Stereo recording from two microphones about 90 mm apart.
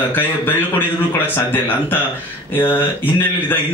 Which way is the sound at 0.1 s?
20° left (ahead or behind).